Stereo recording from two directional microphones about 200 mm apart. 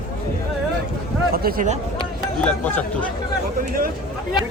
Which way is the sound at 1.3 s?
50° right (ahead or behind).